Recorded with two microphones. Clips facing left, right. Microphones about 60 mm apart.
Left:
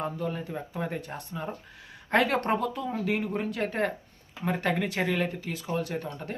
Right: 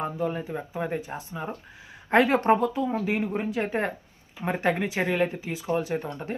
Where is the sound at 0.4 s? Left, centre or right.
Centre.